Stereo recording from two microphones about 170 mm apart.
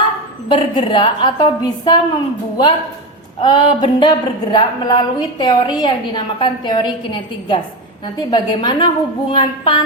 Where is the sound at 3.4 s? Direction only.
30° left (ahead or behind).